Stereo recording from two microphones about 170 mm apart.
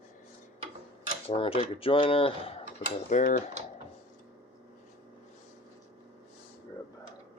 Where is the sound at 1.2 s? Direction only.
30° left (ahead or behind).